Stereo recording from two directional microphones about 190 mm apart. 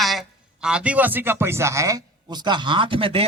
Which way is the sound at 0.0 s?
Centre (ahead or behind).